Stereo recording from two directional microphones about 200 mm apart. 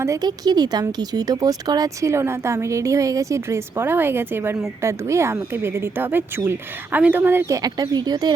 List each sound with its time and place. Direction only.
0.0 s speech: 15° right (ahead or behind)